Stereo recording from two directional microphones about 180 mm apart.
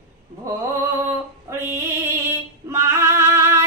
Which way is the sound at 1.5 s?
15° right (ahead or behind).